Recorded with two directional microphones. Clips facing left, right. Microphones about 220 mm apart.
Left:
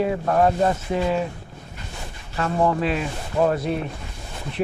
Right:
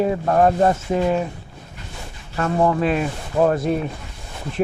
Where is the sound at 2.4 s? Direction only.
50° right (ahead or behind).